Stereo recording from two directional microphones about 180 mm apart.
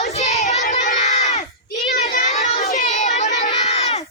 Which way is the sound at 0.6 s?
40° left (ahead or behind).